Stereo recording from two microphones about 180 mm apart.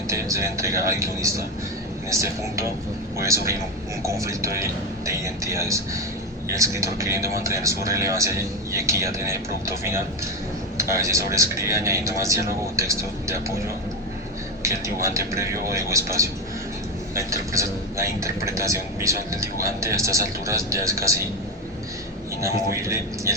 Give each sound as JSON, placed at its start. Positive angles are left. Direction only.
{"t": 0.1, "sound": "a man's voice", "side_deg": -15}
{"t": 15.0, "sound": "a man's voice", "side_deg": -15}
{"t": 22.4, "sound": "a man's voice", "side_deg": -15}